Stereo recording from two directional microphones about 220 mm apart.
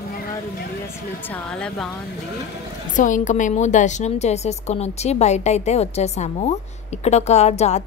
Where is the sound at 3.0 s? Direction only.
35° left (ahead or behind).